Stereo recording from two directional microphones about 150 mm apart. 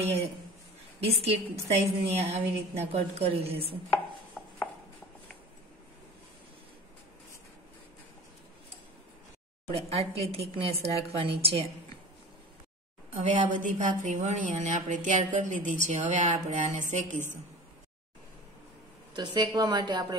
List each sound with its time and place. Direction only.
1.0 s a woman's voice: 40° right (ahead or behind)
9.8 s a woman's voice: 45° right (ahead or behind)
13.2 s a woman's voice: 55° right (ahead or behind)
19.1 s a woman's voice: 30° right (ahead or behind)